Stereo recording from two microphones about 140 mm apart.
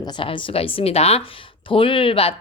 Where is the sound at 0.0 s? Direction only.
35° left (ahead or behind).